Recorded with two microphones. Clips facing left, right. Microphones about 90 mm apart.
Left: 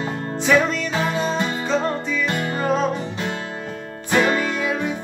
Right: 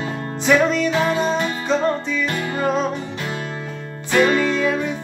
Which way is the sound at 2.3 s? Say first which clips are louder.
Even; 30° left (ahead or behind).